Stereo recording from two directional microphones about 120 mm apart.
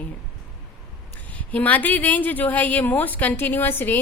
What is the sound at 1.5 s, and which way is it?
A woman's voice, 15° left (ahead or behind).